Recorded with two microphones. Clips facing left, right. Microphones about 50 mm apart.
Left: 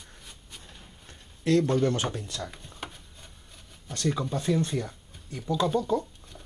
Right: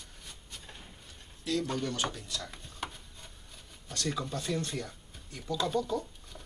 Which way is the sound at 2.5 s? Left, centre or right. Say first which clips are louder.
Even; centre.